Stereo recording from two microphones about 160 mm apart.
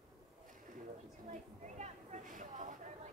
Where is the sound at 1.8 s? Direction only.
50° right (ahead or behind).